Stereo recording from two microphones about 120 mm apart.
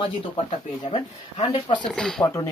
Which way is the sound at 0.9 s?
50° left (ahead or behind).